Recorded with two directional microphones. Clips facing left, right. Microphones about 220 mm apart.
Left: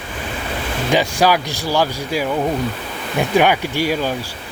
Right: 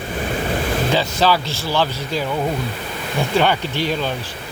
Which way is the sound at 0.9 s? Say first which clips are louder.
Left 4 dB; 15° left (ahead or behind).